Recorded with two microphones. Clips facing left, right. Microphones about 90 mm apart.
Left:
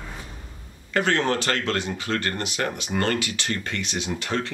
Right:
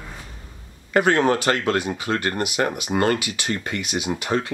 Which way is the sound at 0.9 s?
15° right (ahead or behind).